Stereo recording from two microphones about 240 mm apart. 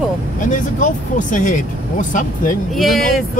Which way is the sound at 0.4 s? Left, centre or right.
Left.